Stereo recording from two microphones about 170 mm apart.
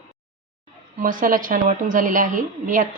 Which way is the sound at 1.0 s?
55° right (ahead or behind).